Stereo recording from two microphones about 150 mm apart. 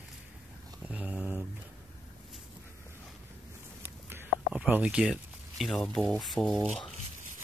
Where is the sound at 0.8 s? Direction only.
10° right (ahead or behind).